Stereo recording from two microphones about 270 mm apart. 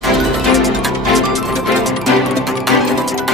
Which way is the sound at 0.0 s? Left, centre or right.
Centre.